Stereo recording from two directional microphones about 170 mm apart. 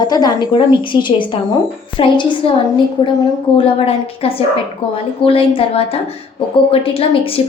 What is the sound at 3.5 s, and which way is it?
A woman's voice, 35° left (ahead or behind).